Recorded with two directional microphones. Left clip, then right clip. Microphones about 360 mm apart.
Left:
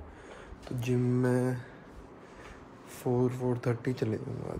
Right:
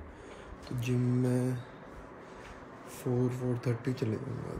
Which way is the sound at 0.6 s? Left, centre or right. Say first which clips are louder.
Left 3 dB; centre.